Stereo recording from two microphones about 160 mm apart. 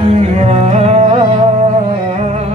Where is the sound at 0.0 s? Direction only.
40° right (ahead or behind).